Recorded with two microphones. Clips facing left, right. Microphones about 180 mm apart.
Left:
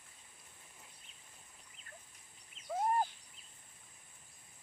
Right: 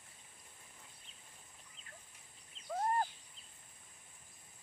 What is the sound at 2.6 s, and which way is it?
Fowl, 30° right (ahead or behind).